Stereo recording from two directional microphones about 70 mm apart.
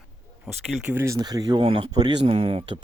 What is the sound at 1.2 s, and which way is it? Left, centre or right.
Speech, right.